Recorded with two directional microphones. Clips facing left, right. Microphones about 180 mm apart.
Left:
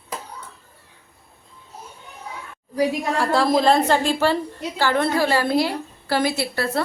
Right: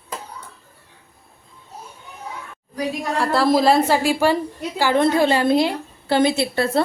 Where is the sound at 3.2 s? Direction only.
Centre (ahead or behind); by 6.8 s 25° right (ahead or behind).